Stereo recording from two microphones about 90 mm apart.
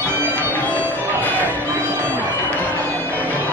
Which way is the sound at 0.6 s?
15° left (ahead or behind).